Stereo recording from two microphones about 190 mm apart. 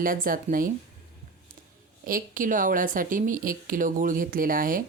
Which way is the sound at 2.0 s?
45° right (ahead or behind).